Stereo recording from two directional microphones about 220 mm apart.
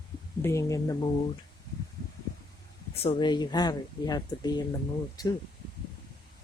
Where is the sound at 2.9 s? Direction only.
25° left (ahead or behind).